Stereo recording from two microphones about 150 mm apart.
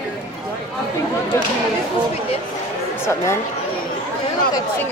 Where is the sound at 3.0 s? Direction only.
20° left (ahead or behind).